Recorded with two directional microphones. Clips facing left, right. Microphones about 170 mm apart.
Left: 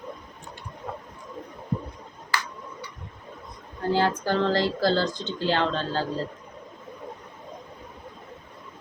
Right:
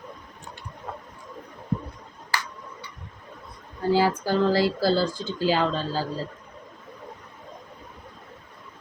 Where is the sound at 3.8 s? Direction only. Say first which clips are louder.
Right 2 dB; 10° right (ahead or behind).